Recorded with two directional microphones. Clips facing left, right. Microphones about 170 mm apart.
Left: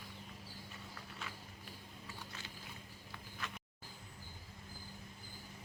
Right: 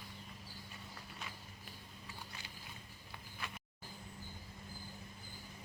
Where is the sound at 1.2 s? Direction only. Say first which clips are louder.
Left 1 dB; 15° right (ahead or behind).